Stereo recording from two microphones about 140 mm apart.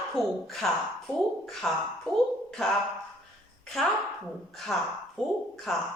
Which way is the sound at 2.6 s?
5° left (ahead or behind).